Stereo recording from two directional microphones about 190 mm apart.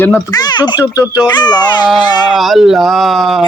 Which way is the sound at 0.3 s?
20° left (ahead or behind).